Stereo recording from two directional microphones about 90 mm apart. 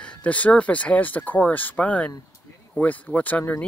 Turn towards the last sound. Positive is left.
turn(degrees=15)  # may be behind; listen again after turning